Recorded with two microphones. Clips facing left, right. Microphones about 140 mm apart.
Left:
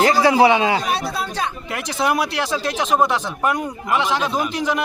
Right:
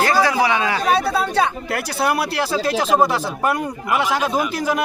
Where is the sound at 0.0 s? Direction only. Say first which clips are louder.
Left 3 dB; 20° left (ahead or behind).